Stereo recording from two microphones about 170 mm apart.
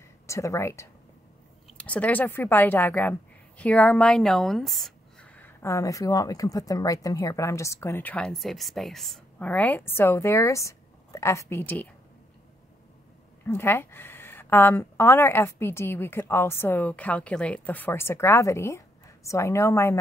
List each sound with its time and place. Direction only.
0.3 s a woman's voice: 15° left (ahead or behind)
13.5 s a woman's voice: 15° left (ahead or behind)